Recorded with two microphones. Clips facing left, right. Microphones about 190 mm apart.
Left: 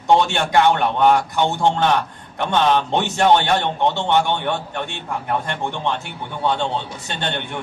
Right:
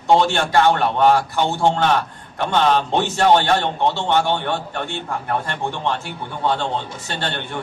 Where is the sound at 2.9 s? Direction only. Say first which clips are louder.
Even; 20° left (ahead or behind).